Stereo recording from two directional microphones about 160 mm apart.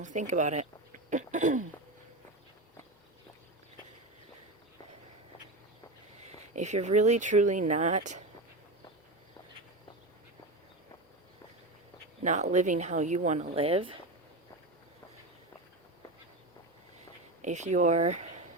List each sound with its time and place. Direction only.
0.0 s speech: 50° right (ahead or behind)
6.5 s speech: 45° right (ahead or behind)
12.2 s speech: 45° right (ahead or behind)
17.4 s speech: 45° right (ahead or behind)